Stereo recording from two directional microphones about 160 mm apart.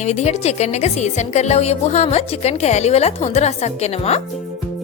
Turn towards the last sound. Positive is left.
turn(degrees=40)  # may be behind; listen again after turning